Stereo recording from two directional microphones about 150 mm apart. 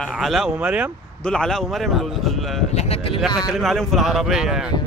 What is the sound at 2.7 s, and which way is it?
Speech, 45° left (ahead or behind).